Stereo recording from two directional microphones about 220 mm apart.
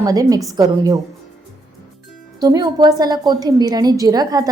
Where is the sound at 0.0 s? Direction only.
15° right (ahead or behind).